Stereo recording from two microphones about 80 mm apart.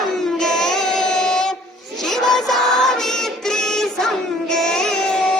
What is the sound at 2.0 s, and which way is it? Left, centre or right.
Music, centre.